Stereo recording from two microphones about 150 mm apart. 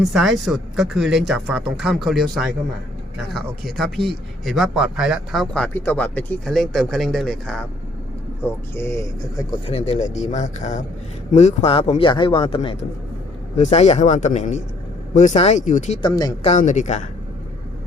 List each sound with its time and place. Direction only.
0.0 s speech: centre (ahead or behind)
3.8 s speech: centre (ahead or behind)
8.4 s speech: 15° left (ahead or behind)
9.6 s speech: 45° left (ahead or behind)
13.6 s speech: 45° left (ahead or behind)
16.0 s speech: 30° left (ahead or behind)
16.6 s speech: 55° left (ahead or behind)